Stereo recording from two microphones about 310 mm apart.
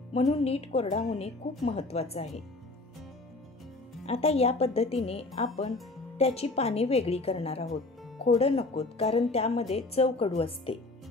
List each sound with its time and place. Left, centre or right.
0.1 s a woman's voice: centre
4.0 s a woman's voice: centre